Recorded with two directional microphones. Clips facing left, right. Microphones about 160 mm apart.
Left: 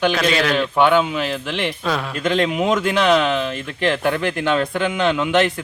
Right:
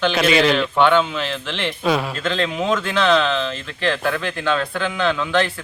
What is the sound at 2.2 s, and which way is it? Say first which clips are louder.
Speech: left 3 dB; 15° left (ahead or behind).